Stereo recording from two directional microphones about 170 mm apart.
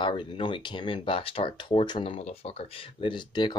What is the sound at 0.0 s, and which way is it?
Speech, 30° left (ahead or behind).